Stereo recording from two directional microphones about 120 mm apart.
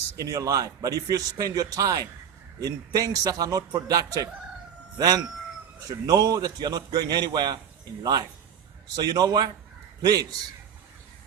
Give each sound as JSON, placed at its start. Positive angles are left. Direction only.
{"t": 0.2, "sound": "a man's voice", "side_deg": -30}
{"t": 9.0, "sound": "a man's voice", "side_deg": -35}